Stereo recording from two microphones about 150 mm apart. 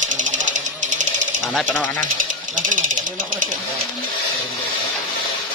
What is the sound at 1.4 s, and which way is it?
Speech, 5° left (ahead or behind).